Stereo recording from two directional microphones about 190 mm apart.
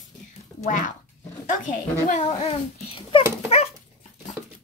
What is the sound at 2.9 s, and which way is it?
Dog, 30° left (ahead or behind).